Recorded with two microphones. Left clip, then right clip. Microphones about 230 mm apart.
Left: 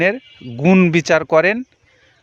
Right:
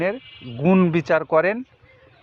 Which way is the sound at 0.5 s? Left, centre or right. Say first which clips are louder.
Left 5 dB; left.